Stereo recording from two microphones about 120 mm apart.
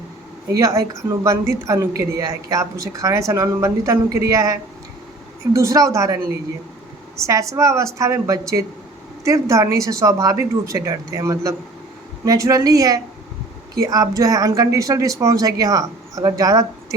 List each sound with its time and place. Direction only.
0.4 s speech: 25° right (ahead or behind)
7.3 s speech: 25° right (ahead or behind)